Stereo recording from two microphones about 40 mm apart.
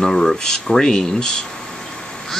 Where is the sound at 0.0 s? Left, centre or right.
Centre.